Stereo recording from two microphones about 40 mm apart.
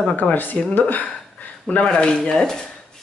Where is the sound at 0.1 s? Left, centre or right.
Left.